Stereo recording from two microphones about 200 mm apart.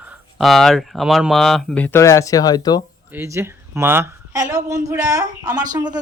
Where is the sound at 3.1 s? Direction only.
15° right (ahead or behind).